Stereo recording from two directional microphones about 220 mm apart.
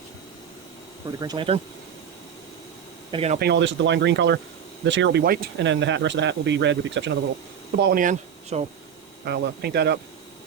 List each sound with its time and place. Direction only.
1.2 s speech: 20° right (ahead or behind)
3.1 s speech: 25° right (ahead or behind)
3.3 s speech: 50° right (ahead or behind)
7.8 s speech: 40° right (ahead or behind)
9.2 s speech: 50° right (ahead or behind)